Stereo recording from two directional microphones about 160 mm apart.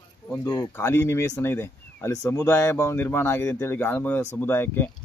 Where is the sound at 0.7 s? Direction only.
15° left (ahead or behind).